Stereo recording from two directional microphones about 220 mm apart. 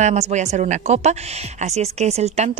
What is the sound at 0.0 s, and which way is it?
A woman's voice, 30° right (ahead or behind).